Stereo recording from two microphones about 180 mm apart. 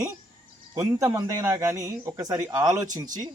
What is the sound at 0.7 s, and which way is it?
A man's voice, 15° right (ahead or behind).